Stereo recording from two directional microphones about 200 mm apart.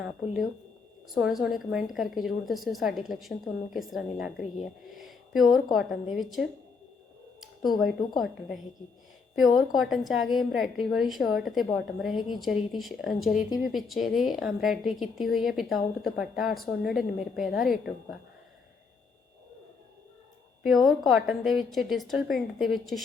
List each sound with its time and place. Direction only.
1.1 s a woman's voice: centre (ahead or behind)
7.8 s a woman's voice: centre (ahead or behind)
20.7 s a woman's voice: centre (ahead or behind)